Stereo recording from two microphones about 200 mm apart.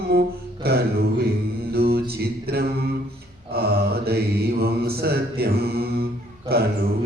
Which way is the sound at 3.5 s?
50° right (ahead or behind).